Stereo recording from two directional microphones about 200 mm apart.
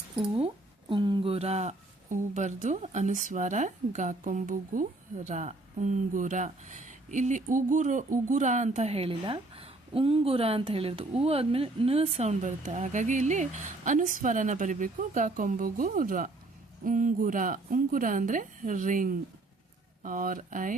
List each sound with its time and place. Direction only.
0.3 s speech: 25° right (ahead or behind)